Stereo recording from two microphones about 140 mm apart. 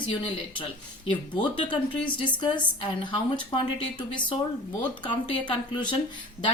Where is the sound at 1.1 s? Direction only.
35° left (ahead or behind).